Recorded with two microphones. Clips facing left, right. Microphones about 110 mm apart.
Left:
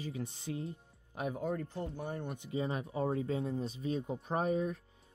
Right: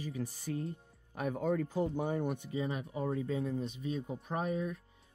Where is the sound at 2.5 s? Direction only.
30° left (ahead or behind).